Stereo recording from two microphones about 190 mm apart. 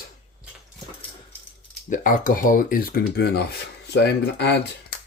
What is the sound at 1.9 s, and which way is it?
Speech, 45° left (ahead or behind).